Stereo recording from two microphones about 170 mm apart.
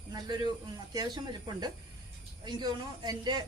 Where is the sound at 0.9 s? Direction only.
25° right (ahead or behind).